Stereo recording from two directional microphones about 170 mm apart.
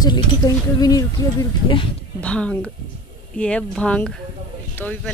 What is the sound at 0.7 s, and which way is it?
Speech, 20° left (ahead or behind).